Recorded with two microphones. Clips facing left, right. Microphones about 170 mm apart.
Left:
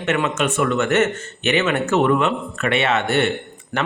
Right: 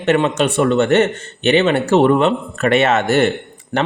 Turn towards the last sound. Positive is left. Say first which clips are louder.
# right 3 dB
turn(degrees=-40)  # may be behind; listen again after turning